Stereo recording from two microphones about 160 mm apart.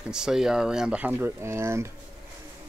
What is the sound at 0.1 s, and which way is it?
Speech, 5° right (ahead or behind).